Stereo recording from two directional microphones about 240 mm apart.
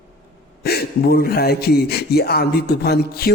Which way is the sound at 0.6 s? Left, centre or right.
Left.